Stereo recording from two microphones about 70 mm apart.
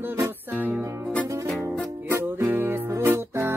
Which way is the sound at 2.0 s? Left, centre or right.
Right.